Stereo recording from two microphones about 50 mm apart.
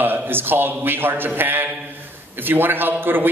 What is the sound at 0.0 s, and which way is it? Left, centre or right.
A man's voice, right.